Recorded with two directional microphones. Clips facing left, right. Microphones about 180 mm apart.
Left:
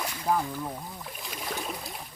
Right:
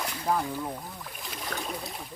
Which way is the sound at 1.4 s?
5° left (ahead or behind).